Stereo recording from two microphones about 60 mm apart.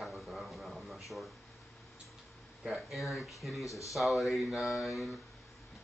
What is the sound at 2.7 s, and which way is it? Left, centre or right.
Speech, centre.